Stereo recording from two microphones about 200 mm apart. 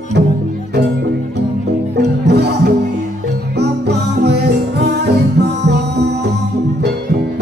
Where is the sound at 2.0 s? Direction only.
55° right (ahead or behind).